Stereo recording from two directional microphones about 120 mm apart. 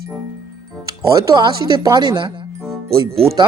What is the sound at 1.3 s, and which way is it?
A man's voice, 40° right (ahead or behind).